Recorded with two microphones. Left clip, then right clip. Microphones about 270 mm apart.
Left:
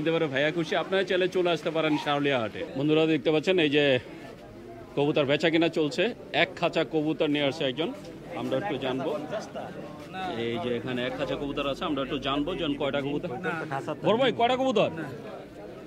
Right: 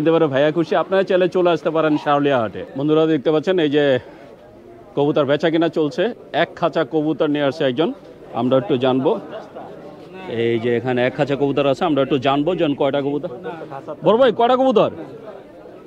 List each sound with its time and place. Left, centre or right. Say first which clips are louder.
0.0 s a man's voice: right 10 dB; right
7.4 s speech: right 10 dB; right
8.4 s a man's voice: right 12 dB; right
10.3 s a man's voice: right 13 dB; right
14.0 s a man's voice: right 10 dB; right